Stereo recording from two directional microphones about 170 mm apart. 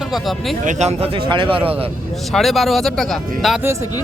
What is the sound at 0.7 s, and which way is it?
A man's voice, 40° right (ahead or behind).